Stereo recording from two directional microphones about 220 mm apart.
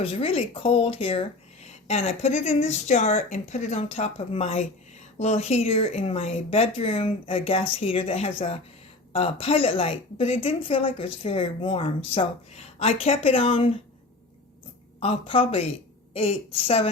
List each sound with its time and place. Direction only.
0.0 s speech: 25° left (ahead or behind)
15.0 s speech: 25° left (ahead or behind)